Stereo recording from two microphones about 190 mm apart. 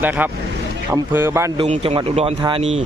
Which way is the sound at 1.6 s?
30° right (ahead or behind).